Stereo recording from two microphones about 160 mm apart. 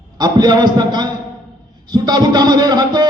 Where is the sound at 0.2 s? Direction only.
25° right (ahead or behind).